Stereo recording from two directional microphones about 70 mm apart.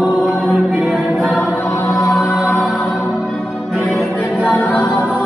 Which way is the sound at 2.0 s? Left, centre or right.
Centre.